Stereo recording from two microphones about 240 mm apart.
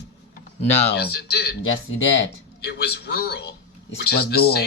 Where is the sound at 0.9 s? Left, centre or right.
Left.